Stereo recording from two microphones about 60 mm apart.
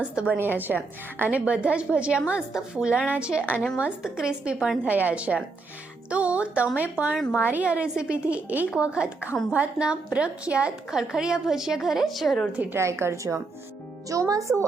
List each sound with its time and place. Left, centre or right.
0.0 s a woman's voice: centre
0.3 s a woman's voice: right; by 4.7 s centre
4.9 s a woman's voice: right; by 12.5 s centre
12.7 s a woman's voice: right
14.1 s speech: right